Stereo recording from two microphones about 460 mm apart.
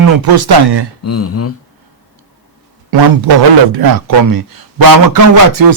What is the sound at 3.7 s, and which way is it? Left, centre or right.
Speech, right.